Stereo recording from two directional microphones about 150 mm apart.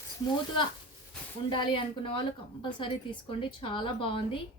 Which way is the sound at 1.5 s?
35° left (ahead or behind).